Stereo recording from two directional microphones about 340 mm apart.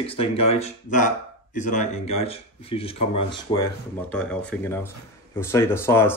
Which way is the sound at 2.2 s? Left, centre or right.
Centre.